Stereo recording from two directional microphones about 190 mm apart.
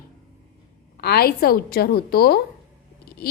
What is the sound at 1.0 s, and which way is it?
A woman's voice, 55° left (ahead or behind).